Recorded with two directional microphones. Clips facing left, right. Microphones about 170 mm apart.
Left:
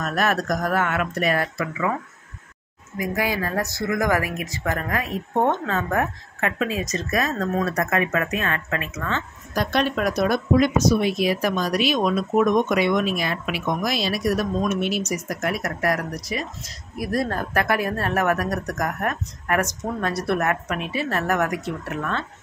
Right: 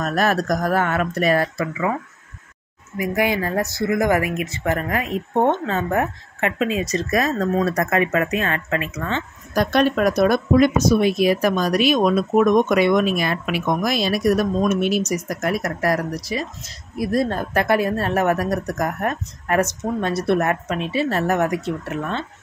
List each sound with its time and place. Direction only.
0.0 s speech: 35° right (ahead or behind)
3.3 s speech: 20° right (ahead or behind)
9.6 s speech: 45° right (ahead or behind); by 21.5 s 25° right (ahead or behind)